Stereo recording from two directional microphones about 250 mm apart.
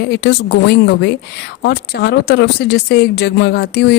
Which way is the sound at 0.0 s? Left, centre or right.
Left.